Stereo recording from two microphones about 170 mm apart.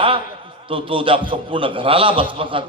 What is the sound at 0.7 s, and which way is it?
A man's voice, 30° right (ahead or behind).